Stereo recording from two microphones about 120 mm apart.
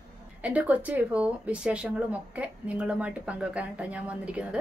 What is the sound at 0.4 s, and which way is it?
Speech, 10° right (ahead or behind).